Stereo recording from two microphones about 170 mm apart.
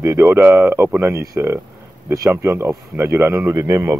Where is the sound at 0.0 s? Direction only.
15° right (ahead or behind).